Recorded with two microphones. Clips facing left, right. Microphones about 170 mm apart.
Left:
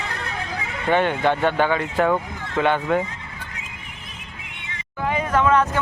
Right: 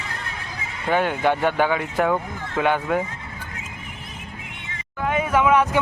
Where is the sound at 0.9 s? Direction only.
5° right (ahead or behind).